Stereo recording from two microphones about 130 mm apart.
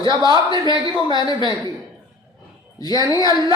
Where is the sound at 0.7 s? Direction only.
40° right (ahead or behind).